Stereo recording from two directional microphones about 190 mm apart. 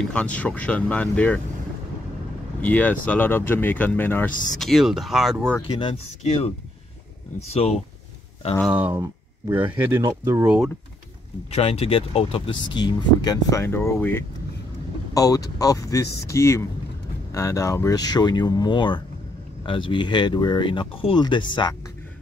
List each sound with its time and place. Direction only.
0.1 s speech: 5° left (ahead or behind)
2.6 s speech: 10° left (ahead or behind)
5.7 s speech: 25° left (ahead or behind)
7.5 s speech: 35° left (ahead or behind)
8.5 s speech: 5° right (ahead or behind)
11.5 s speech: 30° left (ahead or behind)